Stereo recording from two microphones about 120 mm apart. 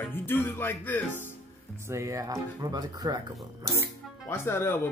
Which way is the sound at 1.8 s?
25° right (ahead or behind).